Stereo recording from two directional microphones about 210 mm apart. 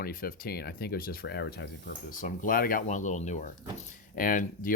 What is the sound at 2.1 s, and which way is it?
Speech, 40° left (ahead or behind).